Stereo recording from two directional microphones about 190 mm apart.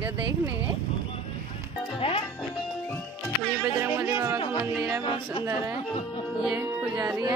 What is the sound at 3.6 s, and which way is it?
Speech, 5° right (ahead or behind).